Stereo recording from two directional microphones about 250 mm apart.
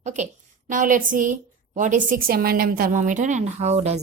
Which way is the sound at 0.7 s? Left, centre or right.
Right.